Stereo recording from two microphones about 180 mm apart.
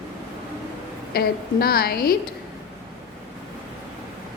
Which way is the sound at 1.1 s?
55° left (ahead or behind).